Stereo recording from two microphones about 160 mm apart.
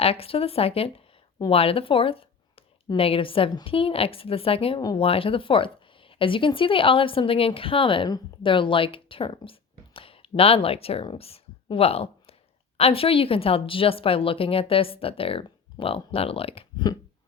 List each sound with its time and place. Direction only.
0.0 s a woman's voice: 35° left (ahead or behind)